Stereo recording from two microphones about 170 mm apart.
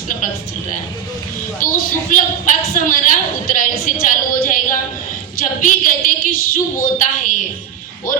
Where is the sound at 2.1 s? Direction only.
50° left (ahead or behind).